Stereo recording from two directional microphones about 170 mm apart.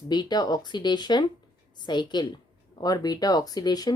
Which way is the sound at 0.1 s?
25° left (ahead or behind).